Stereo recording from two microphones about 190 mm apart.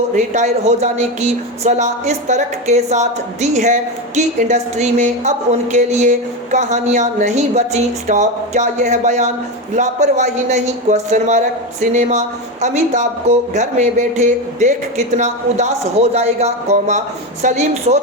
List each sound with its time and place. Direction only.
0.2 s speech: 35° right (ahead or behind)